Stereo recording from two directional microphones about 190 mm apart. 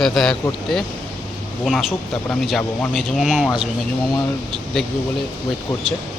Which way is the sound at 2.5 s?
Centre (ahead or behind).